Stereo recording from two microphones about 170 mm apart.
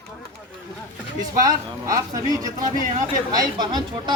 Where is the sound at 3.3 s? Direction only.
25° right (ahead or behind).